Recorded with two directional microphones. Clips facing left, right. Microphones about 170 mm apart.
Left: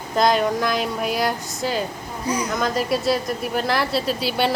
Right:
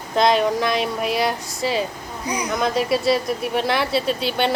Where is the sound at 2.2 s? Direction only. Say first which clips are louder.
Left 2 dB; 15° right (ahead or behind).